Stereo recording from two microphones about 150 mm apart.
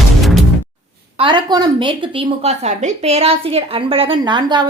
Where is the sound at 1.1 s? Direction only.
35° right (ahead or behind).